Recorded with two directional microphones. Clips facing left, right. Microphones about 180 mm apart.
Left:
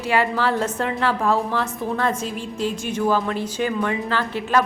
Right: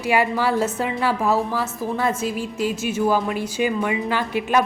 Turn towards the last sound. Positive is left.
turn(degrees=-15)  # may be behind; listen again after turning